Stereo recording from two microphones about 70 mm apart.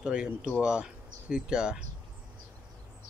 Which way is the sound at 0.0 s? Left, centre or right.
Centre.